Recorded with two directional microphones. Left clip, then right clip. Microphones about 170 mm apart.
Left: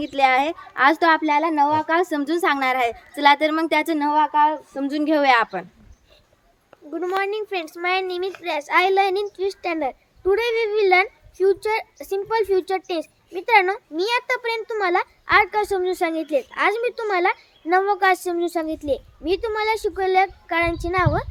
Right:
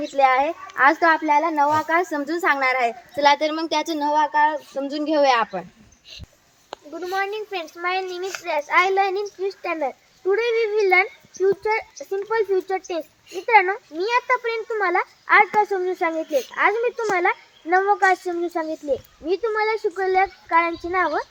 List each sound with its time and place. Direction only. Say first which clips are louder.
0.1 s a child's voice: even; 35° left (ahead or behind); by 3.3 s 50° left (ahead or behind)
3.4 s a woman's voice: left 3 dB; 25° left (ahead or behind)
7.5 s a child's voice: left 2 dB; 45° left (ahead or behind)